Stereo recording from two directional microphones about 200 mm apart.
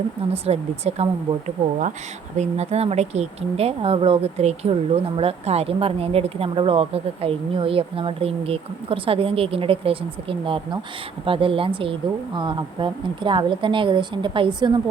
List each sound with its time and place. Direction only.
0.4 s speech: 30° right (ahead or behind)
2.4 s speech: 35° right (ahead or behind)